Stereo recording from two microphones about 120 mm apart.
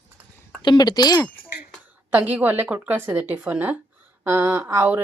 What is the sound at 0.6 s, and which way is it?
Speech, 35° left (ahead or behind).